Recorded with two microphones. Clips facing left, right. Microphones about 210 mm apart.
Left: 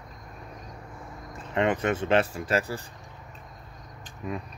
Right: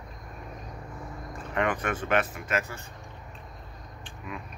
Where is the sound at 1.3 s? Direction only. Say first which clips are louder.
Left 3 dB; 25° left (ahead or behind).